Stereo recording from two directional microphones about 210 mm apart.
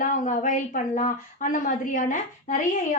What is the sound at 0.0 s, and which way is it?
A woman's voice, 40° left (ahead or behind).